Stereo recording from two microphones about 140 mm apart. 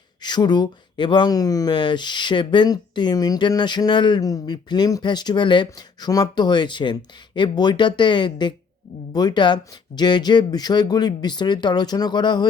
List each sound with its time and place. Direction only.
0.2 s speech: 30° left (ahead or behind)